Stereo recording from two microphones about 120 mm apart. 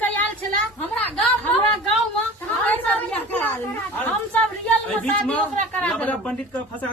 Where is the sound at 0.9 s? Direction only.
10° left (ahead or behind).